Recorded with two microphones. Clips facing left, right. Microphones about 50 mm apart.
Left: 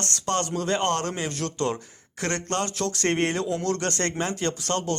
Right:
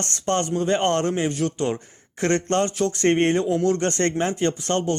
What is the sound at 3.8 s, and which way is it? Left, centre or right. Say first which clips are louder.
A man's voice: right 5 dB; right.